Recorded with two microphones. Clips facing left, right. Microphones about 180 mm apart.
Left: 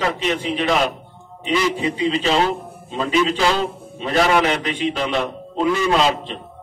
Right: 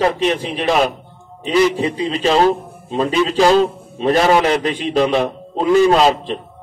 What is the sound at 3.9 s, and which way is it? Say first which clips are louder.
A man's voice: right 4 dB; 40° right (ahead or behind).